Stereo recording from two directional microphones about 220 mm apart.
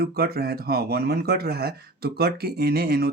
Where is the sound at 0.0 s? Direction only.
45° right (ahead or behind).